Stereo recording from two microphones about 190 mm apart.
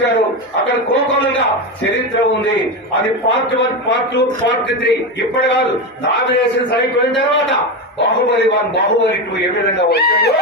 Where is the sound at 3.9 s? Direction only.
60° left (ahead or behind).